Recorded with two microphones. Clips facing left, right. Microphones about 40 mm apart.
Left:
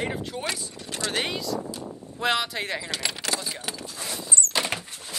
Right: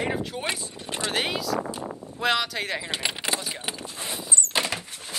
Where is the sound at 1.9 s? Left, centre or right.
Centre.